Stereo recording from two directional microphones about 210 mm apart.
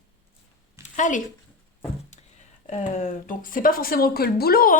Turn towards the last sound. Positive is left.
turn(degrees=45)  # may be behind; listen again after turning